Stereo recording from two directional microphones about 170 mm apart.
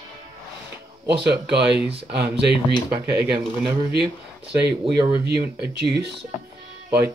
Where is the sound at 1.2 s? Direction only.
75° right (ahead or behind).